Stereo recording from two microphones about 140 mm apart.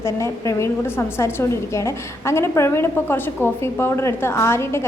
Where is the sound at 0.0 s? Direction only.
20° left (ahead or behind).